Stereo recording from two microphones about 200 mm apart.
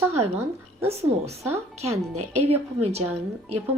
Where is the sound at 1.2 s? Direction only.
15° right (ahead or behind).